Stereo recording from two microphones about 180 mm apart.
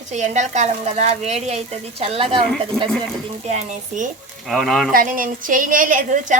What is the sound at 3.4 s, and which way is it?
Speech, 40° right (ahead or behind).